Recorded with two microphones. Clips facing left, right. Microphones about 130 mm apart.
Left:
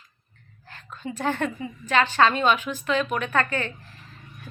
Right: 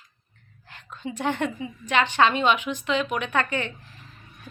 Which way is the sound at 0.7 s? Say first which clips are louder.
Even; 15° right (ahead or behind).